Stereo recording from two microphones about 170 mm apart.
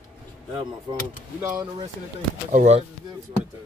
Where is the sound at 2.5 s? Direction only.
40° right (ahead or behind).